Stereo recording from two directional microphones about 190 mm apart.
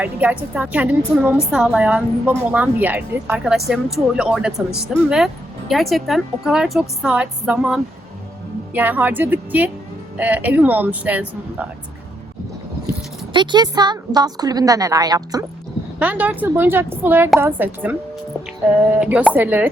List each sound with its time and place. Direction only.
0.0 s a woman's voice: 10° right (ahead or behind)
13.3 s a woman's voice: 25° right (ahead or behind)
16.0 s a woman's voice: 10° right (ahead or behind)
18.9 s a woman's voice: 5° right (ahead or behind)